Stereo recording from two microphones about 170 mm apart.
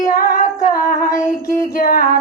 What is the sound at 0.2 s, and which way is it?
Female singing, 50° left (ahead or behind).